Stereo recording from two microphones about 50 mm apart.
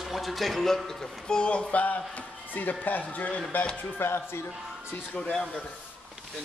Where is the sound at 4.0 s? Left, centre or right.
Left.